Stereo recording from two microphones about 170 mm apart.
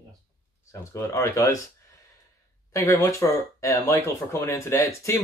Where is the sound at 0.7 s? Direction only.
15° left (ahead or behind).